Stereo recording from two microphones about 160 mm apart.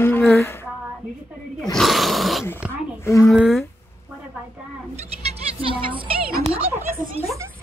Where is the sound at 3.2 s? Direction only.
5° right (ahead or behind).